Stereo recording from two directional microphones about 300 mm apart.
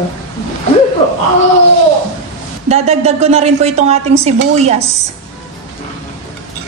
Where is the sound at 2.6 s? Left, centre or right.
Right.